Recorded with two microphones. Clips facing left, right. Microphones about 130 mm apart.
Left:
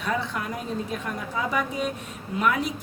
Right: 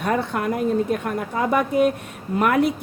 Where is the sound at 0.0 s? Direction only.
55° right (ahead or behind).